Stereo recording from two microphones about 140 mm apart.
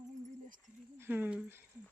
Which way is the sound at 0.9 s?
15° right (ahead or behind).